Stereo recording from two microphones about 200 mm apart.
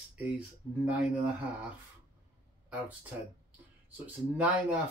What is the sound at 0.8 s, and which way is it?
Speech, 5° right (ahead or behind).